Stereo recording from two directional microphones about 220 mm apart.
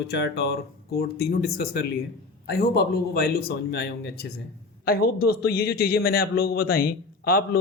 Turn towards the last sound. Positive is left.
turn(degrees=45)  # may be behind; listen again after turning